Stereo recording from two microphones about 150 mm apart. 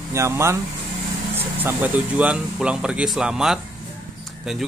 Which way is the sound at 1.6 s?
10° right (ahead or behind).